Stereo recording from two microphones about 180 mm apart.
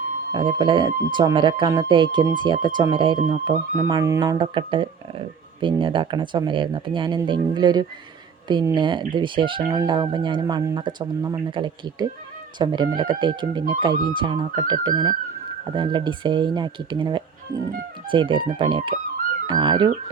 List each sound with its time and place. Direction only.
0.3 s speech: 25° right (ahead or behind)
3.8 s speech: 20° right (ahead or behind)